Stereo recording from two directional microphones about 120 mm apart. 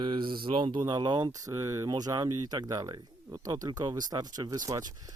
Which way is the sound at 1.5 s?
25° right (ahead or behind).